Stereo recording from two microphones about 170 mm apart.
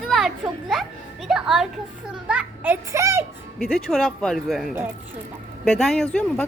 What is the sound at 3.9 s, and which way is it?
A child's voice, centre (ahead or behind).